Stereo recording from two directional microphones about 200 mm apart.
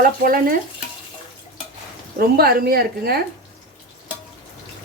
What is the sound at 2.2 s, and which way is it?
Speech, 50° right (ahead or behind).